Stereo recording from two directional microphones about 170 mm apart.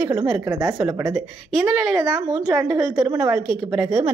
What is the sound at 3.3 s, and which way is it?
Speech, centre (ahead or behind).